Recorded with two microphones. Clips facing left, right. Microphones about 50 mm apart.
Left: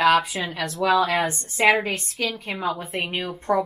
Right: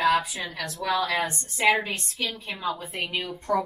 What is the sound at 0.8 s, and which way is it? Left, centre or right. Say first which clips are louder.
Speech: left 7 dB; left.